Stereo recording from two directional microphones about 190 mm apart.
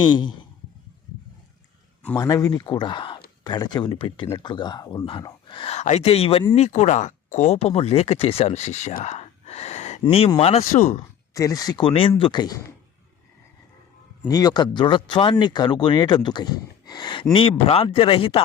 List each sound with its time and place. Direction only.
0.0 s speech: 25° left (ahead or behind)
2.1 s speech: 20° left (ahead or behind); by 9.1 s 40° left (ahead or behind)
9.1 s a sound: 35° left (ahead or behind)
10.7 s speech: 35° left (ahead or behind)
11.3 s speech: 20° left (ahead or behind)
14.3 s speech: 20° left (ahead or behind)